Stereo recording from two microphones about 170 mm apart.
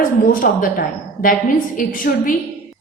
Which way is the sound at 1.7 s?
55° left (ahead or behind).